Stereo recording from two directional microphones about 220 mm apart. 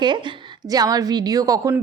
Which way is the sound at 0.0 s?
20° right (ahead or behind).